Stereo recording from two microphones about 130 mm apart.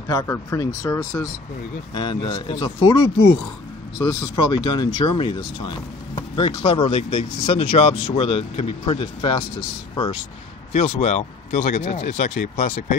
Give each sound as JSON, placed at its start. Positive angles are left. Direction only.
{"t": 0.3, "sound": "speech", "side_deg": 25}
{"t": 2.0, "sound": "speech", "side_deg": 40}
{"t": 10.7, "sound": "speech", "side_deg": 60}